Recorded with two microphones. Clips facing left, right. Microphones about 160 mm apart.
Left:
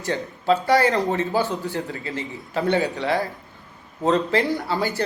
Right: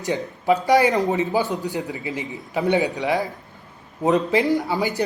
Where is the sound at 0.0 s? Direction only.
15° right (ahead or behind).